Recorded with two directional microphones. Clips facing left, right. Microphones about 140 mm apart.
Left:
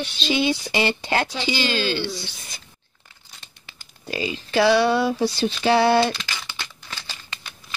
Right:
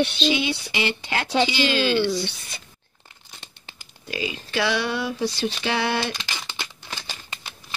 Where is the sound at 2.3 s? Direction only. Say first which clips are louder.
Right 4 dB; 65° right (ahead or behind).